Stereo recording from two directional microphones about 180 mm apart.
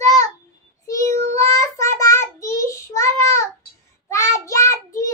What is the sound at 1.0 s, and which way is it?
Child singing, 40° right (ahead or behind).